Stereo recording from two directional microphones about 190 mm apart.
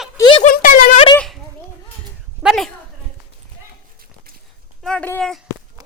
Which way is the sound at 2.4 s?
5° right (ahead or behind).